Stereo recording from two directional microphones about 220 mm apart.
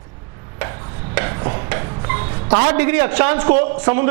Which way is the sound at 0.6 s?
15° right (ahead or behind).